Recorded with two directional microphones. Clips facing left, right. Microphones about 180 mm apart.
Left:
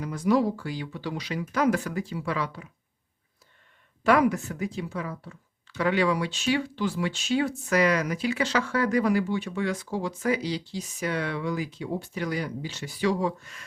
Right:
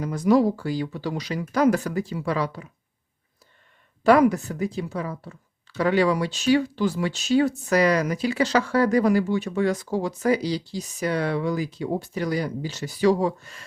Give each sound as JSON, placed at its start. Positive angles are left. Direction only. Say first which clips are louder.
{"t": 0.0, "sound": "speech", "louder": "right 4 dB", "side_deg": -40}
{"t": 4.0, "sound": "speech", "louder": "right 5 dB", "side_deg": -35}